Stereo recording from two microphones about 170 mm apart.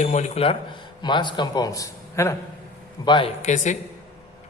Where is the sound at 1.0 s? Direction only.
25° left (ahead or behind).